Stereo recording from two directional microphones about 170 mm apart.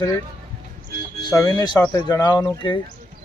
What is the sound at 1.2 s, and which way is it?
Speech, 20° left (ahead or behind).